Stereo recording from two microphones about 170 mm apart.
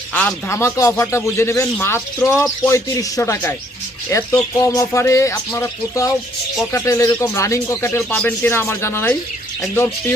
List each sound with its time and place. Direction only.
0.1 s speech: 10° left (ahead or behind)